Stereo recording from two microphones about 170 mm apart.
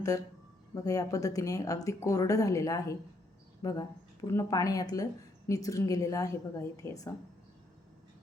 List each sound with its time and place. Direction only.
0.7 s speech: 20° left (ahead or behind)